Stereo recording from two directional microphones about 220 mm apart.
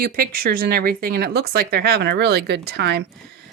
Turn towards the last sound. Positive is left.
turn(degrees=-50)  # may be behind; listen again after turning